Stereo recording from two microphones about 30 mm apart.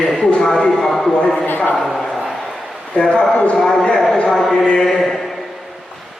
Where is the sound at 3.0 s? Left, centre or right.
Left.